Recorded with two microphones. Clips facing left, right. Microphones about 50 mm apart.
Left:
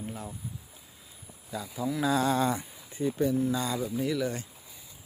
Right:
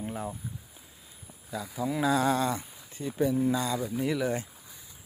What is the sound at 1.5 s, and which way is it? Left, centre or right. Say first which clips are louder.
Speech: right 1 dB; centre.